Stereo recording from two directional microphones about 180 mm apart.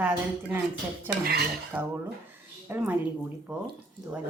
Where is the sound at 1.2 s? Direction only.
60° right (ahead or behind).